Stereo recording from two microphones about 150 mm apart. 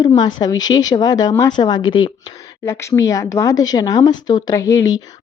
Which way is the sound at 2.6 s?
15° left (ahead or behind).